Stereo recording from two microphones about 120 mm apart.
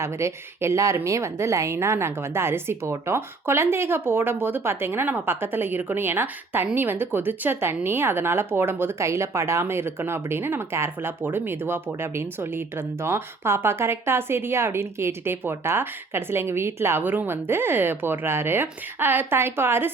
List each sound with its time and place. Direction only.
0.0 s speech: 25° right (ahead or behind)